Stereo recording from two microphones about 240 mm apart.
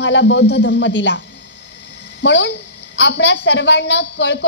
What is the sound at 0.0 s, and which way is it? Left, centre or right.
A woman's voice, left.